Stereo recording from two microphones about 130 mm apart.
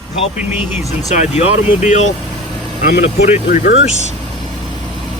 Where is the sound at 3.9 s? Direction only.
65° right (ahead or behind).